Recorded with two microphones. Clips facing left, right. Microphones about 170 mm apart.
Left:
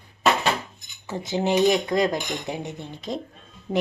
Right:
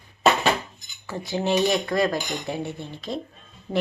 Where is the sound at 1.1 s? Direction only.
20° left (ahead or behind).